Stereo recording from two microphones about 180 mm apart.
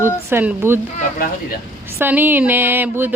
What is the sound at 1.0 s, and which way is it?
Speech, 50° left (ahead or behind).